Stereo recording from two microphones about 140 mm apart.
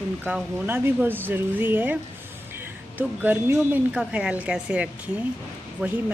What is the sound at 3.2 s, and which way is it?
Speech, 10° right (ahead or behind).